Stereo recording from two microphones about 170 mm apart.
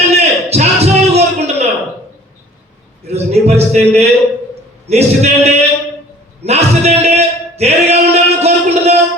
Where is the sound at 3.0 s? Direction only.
40° right (ahead or behind).